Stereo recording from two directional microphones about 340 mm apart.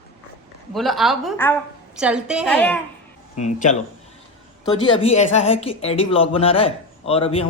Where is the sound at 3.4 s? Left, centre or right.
Left.